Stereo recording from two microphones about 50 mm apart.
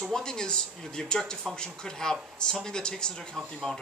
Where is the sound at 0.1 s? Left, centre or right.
Centre.